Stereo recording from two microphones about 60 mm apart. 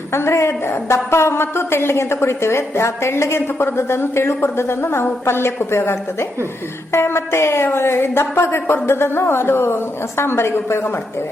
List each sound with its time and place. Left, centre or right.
0.1 s a woman's voice: left